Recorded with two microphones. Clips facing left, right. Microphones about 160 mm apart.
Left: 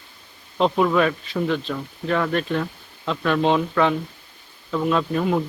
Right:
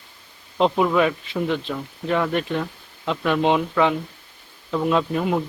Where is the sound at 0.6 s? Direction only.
10° right (ahead or behind).